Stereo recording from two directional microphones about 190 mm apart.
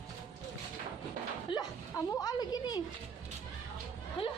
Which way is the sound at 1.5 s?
25° left (ahead or behind).